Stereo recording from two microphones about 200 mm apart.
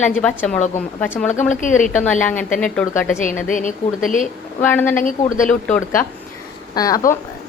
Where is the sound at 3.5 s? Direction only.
40° left (ahead or behind).